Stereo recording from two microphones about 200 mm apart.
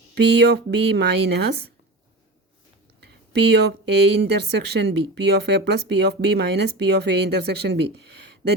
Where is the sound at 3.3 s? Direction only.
55° right (ahead or behind).